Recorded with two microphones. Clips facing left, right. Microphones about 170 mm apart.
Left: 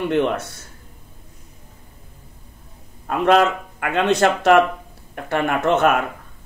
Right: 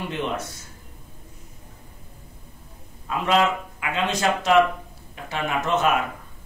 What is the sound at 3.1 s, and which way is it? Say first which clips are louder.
A man's voice: left 5 dB; 55° left (ahead or behind).